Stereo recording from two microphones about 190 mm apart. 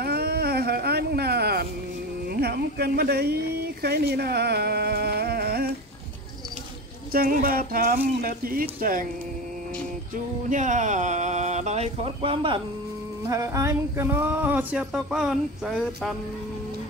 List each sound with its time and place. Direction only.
0.0 s a sound: 55° right (ahead or behind)
2.2 s speech: 55° right (ahead or behind)
7.1 s speech: 50° right (ahead or behind)
10.5 s speech: 40° right (ahead or behind)
13.3 s speech: 15° right (ahead or behind); by 16.2 s centre (ahead or behind)